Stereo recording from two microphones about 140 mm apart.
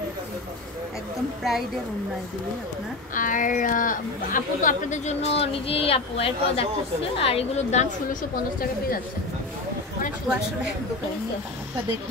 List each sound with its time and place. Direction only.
3.2 s a woman's voice: 70° left (ahead or behind); by 8.2 s 55° left (ahead or behind)